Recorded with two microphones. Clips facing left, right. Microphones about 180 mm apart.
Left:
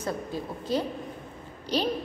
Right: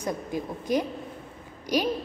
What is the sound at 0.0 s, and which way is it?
A woman's voice, 15° right (ahead or behind).